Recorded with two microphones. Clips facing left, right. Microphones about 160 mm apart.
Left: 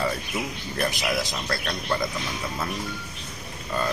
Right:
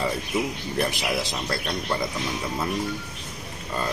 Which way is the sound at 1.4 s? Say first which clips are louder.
Right 1 dB; 15° right (ahead or behind).